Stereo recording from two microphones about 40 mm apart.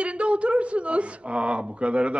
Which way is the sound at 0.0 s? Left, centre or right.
Right.